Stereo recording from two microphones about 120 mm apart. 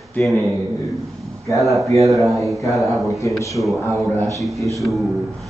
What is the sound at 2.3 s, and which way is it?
Speech, centre (ahead or behind).